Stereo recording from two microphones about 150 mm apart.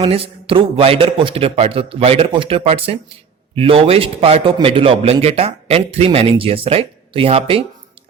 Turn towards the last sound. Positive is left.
turn(degrees=-40)  # may be behind; listen again after turning